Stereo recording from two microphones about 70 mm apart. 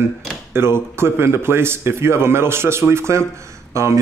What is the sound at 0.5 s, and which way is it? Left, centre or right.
Speech, right.